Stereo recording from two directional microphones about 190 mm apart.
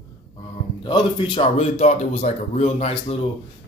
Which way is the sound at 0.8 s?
25° left (ahead or behind).